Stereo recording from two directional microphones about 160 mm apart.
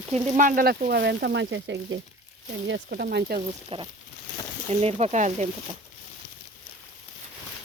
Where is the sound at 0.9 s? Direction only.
90° right.